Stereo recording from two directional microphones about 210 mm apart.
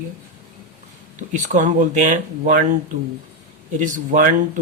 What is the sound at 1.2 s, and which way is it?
Speech, 35° right (ahead or behind).